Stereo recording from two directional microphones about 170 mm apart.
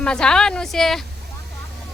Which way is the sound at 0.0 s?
5° left (ahead or behind).